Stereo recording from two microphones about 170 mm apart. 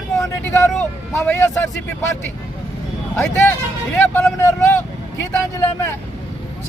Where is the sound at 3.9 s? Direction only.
10° left (ahead or behind).